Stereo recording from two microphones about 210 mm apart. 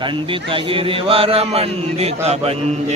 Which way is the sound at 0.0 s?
25° right (ahead or behind).